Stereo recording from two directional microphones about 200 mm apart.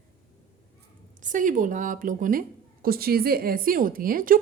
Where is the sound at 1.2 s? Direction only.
40° right (ahead or behind).